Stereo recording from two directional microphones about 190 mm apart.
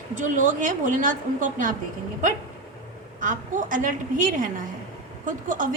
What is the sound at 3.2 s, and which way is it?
A woman's voice, 45° right (ahead or behind).